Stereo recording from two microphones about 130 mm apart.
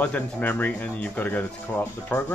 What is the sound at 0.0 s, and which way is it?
Speech, 10° left (ahead or behind).